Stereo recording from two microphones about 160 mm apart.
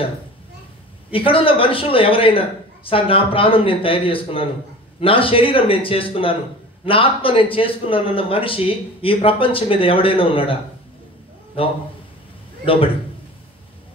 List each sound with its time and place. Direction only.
1.1 s speech: 35° left (ahead or behind)